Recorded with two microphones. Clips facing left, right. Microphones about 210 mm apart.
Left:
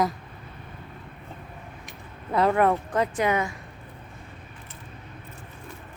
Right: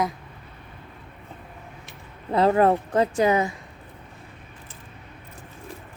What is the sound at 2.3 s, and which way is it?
Speech, 30° right (ahead or behind).